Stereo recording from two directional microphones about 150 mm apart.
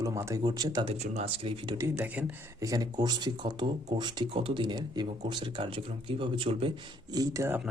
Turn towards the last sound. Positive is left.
turn(degrees=-20)  # may be behind; listen again after turning